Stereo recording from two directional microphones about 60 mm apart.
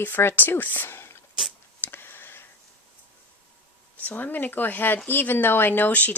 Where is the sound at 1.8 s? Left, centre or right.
Left.